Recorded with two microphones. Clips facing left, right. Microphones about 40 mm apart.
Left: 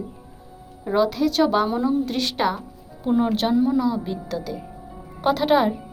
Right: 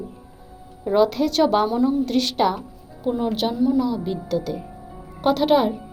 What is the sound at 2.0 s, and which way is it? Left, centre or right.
A woman's voice, centre.